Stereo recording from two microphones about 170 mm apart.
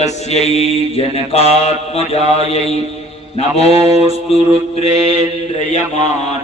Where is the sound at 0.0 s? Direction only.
40° left (ahead or behind).